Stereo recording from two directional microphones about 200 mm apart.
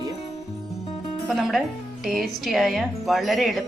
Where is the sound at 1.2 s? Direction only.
Centre (ahead or behind).